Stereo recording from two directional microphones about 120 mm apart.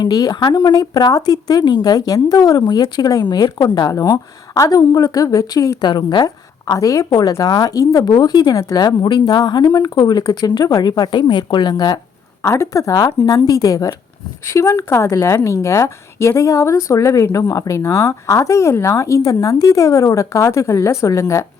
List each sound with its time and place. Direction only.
0.0 s a woman's voice: 35° left (ahead or behind)
12.4 s a woman's voice: 25° left (ahead or behind)